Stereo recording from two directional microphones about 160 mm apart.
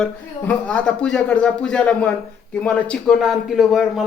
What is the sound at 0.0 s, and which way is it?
A man's voice, 5° left (ahead or behind).